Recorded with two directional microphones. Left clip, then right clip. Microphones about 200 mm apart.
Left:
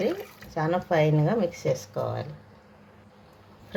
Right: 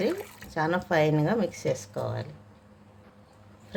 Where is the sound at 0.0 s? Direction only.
10° right (ahead or behind).